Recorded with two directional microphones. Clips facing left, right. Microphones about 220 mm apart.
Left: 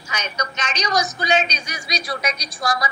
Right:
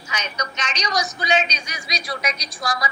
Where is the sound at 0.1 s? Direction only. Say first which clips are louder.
Left 1 dB; 45° left (ahead or behind).